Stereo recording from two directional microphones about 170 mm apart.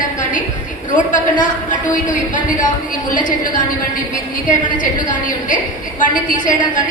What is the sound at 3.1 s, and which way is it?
A woman's voice, 50° left (ahead or behind).